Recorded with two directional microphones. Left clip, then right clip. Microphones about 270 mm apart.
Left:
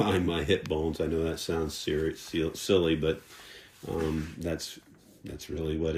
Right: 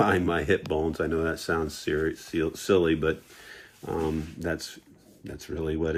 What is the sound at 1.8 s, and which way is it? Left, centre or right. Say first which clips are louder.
Speech: right 3 dB; right.